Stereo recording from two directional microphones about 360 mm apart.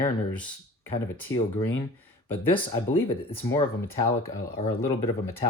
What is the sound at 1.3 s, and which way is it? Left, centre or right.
Speech, left.